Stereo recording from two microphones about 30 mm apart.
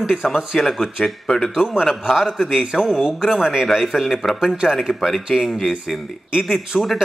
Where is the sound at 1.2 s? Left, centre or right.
Left.